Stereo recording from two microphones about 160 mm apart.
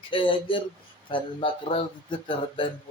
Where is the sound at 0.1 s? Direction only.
35° left (ahead or behind).